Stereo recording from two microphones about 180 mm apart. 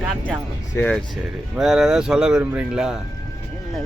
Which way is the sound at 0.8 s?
15° left (ahead or behind).